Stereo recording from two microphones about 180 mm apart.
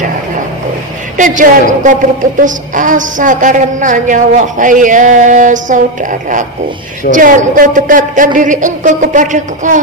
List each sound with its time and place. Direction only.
1.1 s a woman's voice: 45° right (ahead or behind)
7.1 s a woman's voice: 45° right (ahead or behind)